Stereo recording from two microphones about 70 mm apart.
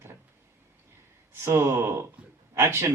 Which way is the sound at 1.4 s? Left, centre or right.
Right.